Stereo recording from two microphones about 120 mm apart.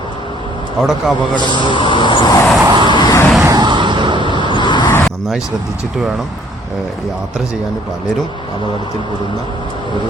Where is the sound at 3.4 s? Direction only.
35° right (ahead or behind).